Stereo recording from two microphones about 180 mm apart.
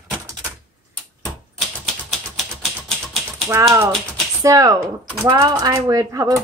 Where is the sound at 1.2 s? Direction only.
Centre (ahead or behind).